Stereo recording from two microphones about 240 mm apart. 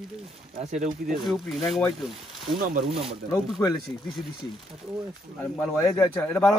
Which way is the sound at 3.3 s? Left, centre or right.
Centre.